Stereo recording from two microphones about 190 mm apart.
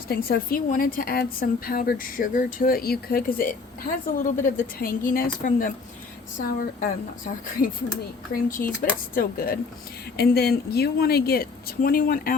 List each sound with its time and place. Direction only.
0.1 s a woman's voice: 50° left (ahead or behind)
8.3 s a woman's voice: 45° left (ahead or behind)